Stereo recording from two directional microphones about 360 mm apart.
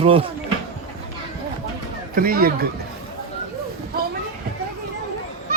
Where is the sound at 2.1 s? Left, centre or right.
Right.